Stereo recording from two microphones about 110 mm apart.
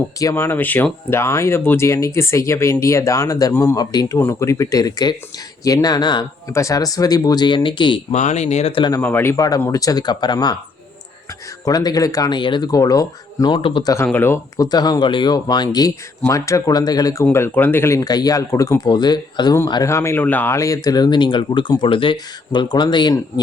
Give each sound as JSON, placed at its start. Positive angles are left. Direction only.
{"t": 0.2, "sound": "speech", "side_deg": 25}
{"t": 6.5, "sound": "speech", "side_deg": 30}
{"t": 8.1, "sound": "speech", "side_deg": 90}
{"t": 9.0, "sound": "speech", "side_deg": 20}
{"t": 9.3, "sound": "speech", "side_deg": 30}
{"t": 11.6, "sound": "speech", "side_deg": 35}
{"t": 12.4, "sound": "speech", "side_deg": 45}
{"t": 13.6, "sound": "speech", "side_deg": 55}
{"t": 13.8, "sound": "speech", "side_deg": 25}
{"t": 17.3, "sound": "speech", "side_deg": 20}
{"t": 19.9, "sound": "speech", "side_deg": 25}
{"t": 20.6, "sound": "speech", "side_deg": 30}